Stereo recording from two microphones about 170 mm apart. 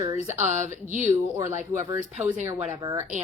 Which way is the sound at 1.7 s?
15° right (ahead or behind).